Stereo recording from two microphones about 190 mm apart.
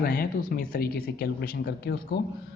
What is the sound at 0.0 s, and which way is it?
Speech, 50° left (ahead or behind).